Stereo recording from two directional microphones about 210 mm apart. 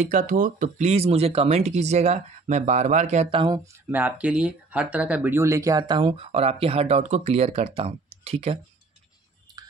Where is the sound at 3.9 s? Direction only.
10° right (ahead or behind); by 8.6 s 30° right (ahead or behind).